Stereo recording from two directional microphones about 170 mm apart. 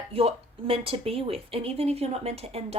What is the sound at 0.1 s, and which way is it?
Speech, 35° right (ahead or behind).